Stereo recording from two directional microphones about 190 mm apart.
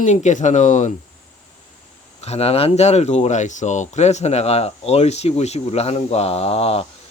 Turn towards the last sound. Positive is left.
turn(degrees=30)  # may be behind; listen again after turning